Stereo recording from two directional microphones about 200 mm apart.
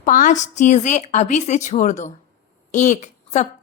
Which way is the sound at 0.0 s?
40° left (ahead or behind).